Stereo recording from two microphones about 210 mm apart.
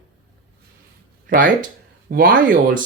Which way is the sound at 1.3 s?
40° right (ahead or behind).